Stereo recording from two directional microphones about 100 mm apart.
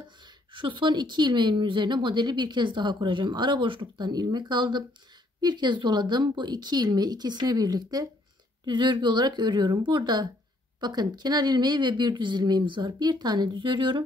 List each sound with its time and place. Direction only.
0.0 s a woman's voice: 55° right (ahead or behind)